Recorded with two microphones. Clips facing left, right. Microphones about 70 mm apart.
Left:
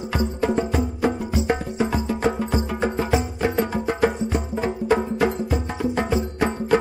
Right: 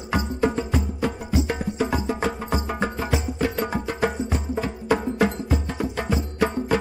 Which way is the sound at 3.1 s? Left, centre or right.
Left.